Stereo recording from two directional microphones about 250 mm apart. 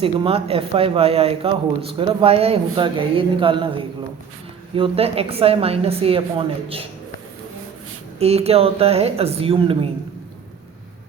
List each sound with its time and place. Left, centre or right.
0.0 s a woman's voice: right
8.2 s a woman's voice: right